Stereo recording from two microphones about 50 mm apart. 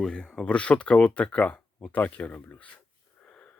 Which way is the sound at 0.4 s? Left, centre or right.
Left.